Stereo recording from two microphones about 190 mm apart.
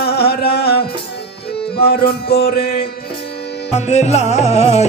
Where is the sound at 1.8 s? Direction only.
55° left (ahead or behind).